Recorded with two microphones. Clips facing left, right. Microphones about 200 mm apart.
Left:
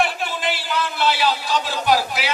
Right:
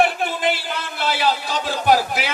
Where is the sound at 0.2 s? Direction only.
50° right (ahead or behind).